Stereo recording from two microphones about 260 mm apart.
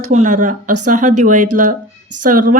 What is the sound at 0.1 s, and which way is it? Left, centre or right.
Speech, right.